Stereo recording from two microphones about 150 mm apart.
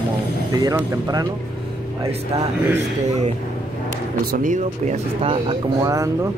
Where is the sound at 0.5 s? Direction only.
20° right (ahead or behind).